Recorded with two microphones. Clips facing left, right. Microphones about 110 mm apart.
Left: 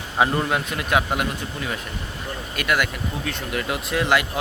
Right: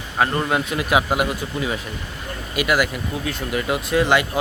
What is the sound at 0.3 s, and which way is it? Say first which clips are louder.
Speech: right 2 dB; centre (ahead or behind).